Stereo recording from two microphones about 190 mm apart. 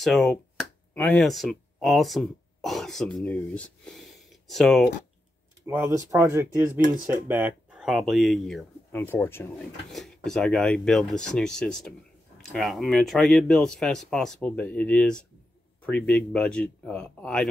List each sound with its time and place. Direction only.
0.0 s speech: centre (ahead or behind)
5.7 s speech: 15° right (ahead or behind)
8.9 s speech: 10° left (ahead or behind)